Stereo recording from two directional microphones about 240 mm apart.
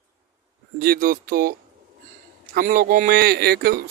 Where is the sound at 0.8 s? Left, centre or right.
Right.